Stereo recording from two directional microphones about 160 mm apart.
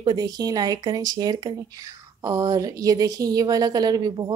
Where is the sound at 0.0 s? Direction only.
25° right (ahead or behind).